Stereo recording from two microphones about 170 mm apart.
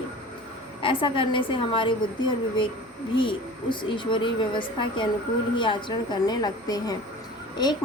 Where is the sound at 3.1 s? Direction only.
30° left (ahead or behind).